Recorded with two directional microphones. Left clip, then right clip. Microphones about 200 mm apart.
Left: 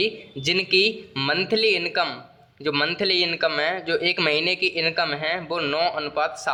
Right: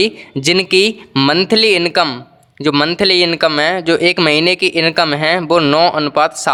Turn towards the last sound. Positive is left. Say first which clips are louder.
# right 11 dB
turn(degrees=-35)  # may be behind; listen again after turning